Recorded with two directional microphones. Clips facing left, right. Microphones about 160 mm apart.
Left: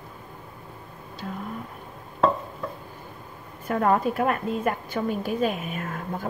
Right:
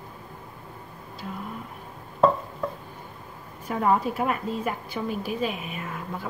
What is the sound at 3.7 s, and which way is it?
A woman's voice, 55° left (ahead or behind).